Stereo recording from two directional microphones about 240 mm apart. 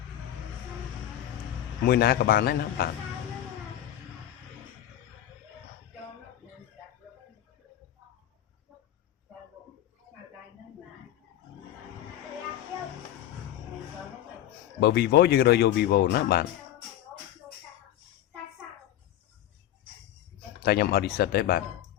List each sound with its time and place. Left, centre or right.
1.9 s speech: left
14.8 s speech: left
20.6 s speech: left